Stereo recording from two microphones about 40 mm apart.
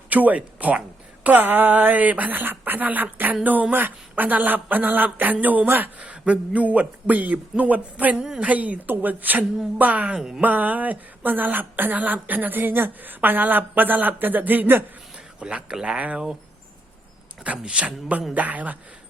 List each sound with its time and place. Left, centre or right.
0.1 s a woman's voice: right
4.1 s a woman's voice: right
6.0 s speech: right
8.1 s a woman's voice: centre
8.4 s a woman's voice: right
10.2 s a woman's voice: centre
10.4 s a woman's voice: right
15.4 s speech: right
17.7 s speech: right
18.3 s speech: right